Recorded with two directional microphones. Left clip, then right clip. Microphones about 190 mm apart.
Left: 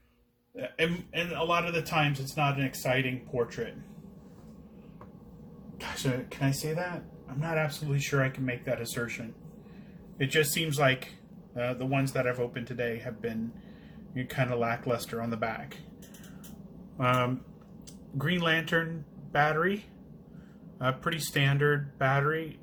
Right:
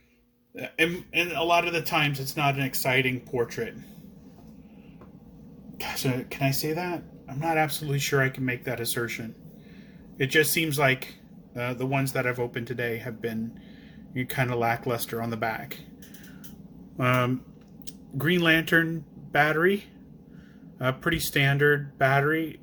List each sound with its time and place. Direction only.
0.5 s a man's voice: 45° right (ahead or behind)
5.7 s a man's voice: 50° right (ahead or behind)
17.0 s a man's voice: 40° right (ahead or behind)